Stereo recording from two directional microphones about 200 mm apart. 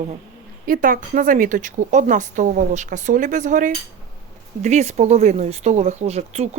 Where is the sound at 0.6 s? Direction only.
45° right (ahead or behind).